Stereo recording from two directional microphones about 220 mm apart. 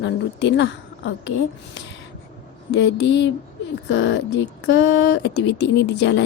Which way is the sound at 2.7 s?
55° left (ahead or behind).